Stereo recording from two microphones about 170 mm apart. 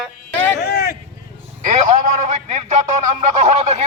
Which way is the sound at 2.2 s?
45° right (ahead or behind).